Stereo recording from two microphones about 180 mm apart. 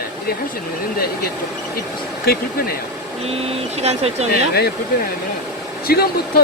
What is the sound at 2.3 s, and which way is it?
Speech, 60° left (ahead or behind).